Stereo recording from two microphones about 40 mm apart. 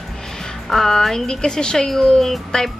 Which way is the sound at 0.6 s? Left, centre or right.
Centre.